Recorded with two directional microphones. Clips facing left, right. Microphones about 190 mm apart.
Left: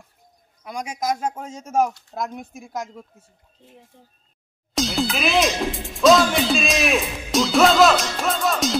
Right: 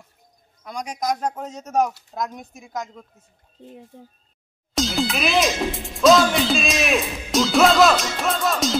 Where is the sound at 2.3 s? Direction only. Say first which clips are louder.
Left 1 dB; 5° left (ahead or behind).